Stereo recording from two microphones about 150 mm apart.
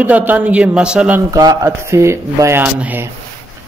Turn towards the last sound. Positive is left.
turn(degrees=-10)  # may be behind; listen again after turning